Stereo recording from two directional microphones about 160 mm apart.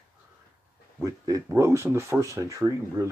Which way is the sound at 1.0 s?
20° right (ahead or behind).